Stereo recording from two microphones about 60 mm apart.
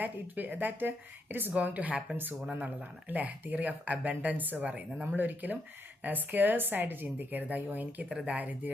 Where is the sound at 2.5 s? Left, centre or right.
Right.